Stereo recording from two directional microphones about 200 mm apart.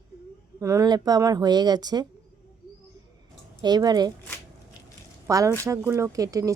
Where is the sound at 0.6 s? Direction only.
15° right (ahead or behind).